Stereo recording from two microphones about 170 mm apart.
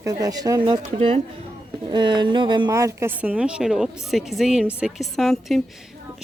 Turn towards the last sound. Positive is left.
turn(degrees=0)  # may be behind; listen again after turning